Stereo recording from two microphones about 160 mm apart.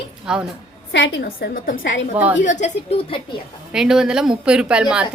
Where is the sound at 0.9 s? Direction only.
90° left; by 1.9 s 60° left (ahead or behind).